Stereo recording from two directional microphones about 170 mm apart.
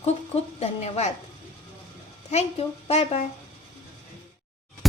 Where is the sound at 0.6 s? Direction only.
40° left (ahead or behind).